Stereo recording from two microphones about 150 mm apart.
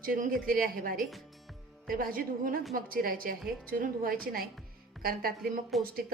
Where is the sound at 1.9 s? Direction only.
75° right (ahead or behind).